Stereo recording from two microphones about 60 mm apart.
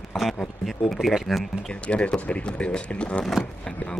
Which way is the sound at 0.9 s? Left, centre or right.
Centre.